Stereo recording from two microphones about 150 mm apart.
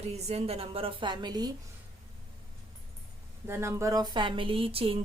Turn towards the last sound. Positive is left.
turn(degrees=-40)  # may be behind; listen again after turning